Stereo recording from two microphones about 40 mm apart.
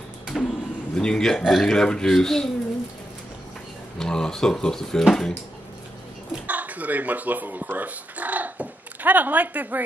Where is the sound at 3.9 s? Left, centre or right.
Centre.